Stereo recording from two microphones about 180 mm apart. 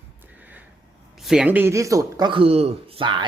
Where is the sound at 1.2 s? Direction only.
Centre (ahead or behind); by 3.2 s 30° right (ahead or behind).